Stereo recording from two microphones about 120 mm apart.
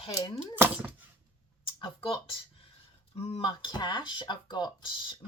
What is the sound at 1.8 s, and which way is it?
Speech, 45° left (ahead or behind).